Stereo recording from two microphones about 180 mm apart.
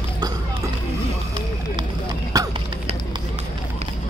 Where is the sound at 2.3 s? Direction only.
20° right (ahead or behind).